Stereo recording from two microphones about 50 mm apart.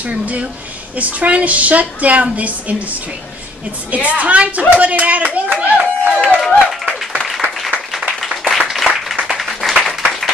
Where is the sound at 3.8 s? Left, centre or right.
Right.